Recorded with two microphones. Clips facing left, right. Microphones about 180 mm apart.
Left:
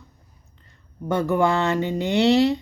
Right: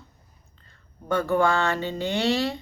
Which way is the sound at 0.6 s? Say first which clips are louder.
Left 2 dB; 20° left (ahead or behind).